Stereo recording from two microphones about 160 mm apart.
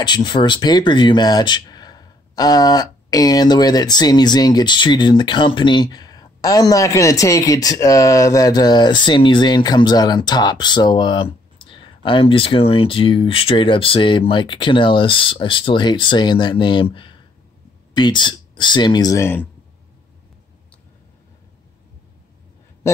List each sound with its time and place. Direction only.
0.0 s speech: 30° left (ahead or behind)